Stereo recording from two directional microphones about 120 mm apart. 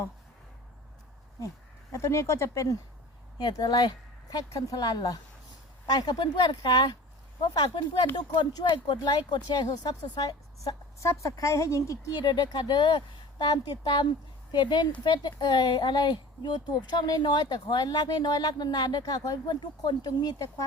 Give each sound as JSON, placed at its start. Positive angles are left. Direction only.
{"t": 1.9, "sound": "speech", "side_deg": 25}
{"t": 3.3, "sound": "speech", "side_deg": 35}